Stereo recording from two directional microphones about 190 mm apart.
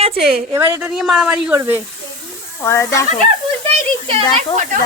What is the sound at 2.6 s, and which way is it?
Speech, 15° left (ahead or behind).